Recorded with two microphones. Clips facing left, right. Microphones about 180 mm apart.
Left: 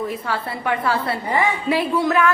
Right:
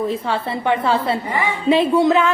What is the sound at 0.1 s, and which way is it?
A woman's voice, 25° right (ahead or behind).